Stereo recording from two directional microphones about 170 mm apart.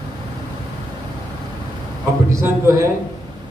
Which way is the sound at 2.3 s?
15° right (ahead or behind).